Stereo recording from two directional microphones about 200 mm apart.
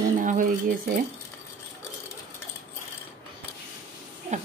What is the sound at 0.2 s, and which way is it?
Cutlery, 40° right (ahead or behind).